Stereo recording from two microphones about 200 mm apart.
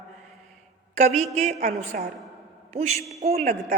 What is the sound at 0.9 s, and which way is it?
A woman's voice, 35° right (ahead or behind).